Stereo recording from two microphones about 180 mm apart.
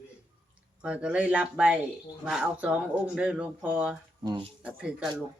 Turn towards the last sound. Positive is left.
turn(degrees=-5)  # may be behind; listen again after turning